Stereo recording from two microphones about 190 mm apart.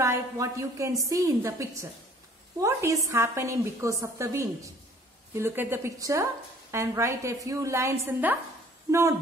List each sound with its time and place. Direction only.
0.0 s a woman's voice: 15° right (ahead or behind)